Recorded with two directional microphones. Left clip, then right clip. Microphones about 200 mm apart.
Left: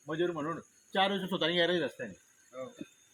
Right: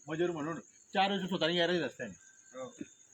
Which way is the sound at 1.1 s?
15° right (ahead or behind).